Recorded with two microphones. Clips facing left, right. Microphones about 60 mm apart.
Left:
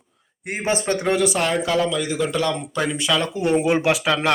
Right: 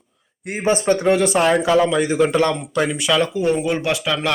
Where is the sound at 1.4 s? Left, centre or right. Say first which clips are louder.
Right 5 dB; right.